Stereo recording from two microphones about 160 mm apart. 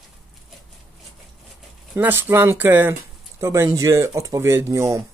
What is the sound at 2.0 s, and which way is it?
Speech, 15° right (ahead or behind).